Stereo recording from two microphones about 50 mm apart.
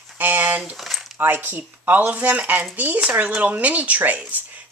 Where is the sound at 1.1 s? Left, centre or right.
Right.